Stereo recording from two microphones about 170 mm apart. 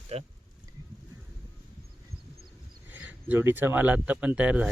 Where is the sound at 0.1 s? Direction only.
35° right (ahead or behind).